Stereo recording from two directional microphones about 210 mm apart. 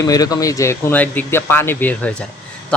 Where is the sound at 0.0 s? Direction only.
15° left (ahead or behind).